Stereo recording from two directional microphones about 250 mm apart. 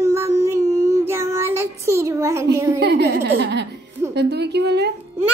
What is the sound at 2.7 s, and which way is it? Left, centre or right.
A woman's voice, right.